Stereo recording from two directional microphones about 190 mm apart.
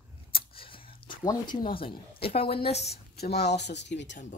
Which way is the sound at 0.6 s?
30° left (ahead or behind).